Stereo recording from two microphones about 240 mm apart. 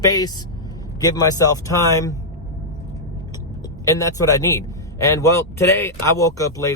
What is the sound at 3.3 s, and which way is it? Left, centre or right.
A man's voice, centre.